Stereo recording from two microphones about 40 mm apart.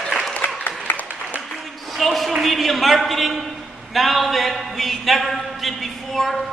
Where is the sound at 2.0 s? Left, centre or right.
Centre.